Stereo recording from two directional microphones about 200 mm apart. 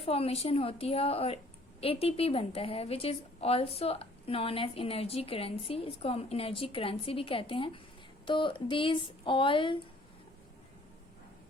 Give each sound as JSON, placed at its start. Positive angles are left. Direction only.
{"t": 0.0, "sound": "a woman's voice", "side_deg": 30}